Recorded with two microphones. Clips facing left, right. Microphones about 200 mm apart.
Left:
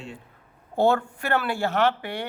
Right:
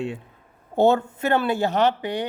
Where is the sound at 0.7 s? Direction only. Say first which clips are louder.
Right 3 dB; 20° right (ahead or behind).